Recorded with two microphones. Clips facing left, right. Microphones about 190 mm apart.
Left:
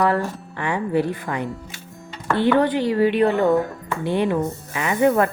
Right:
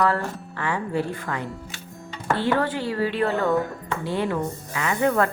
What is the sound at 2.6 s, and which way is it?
A woman's voice, 20° left (ahead or behind).